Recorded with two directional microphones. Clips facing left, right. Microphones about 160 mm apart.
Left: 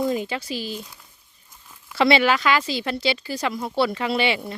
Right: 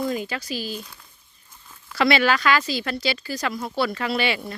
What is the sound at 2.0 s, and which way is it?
Speech, 25° left (ahead or behind).